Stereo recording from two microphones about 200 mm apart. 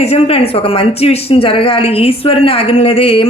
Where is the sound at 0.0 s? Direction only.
30° left (ahead or behind).